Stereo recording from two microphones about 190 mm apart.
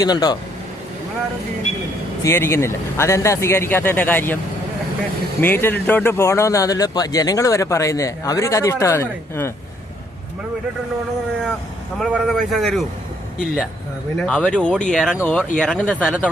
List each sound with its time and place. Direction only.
0.0 s speech: 20° left (ahead or behind)
2.2 s speech: 15° left (ahead or behind)
5.4 s speech: 10° left (ahead or behind)
11.9 s speech: centre (ahead or behind)
14.2 s speech: 5° left (ahead or behind)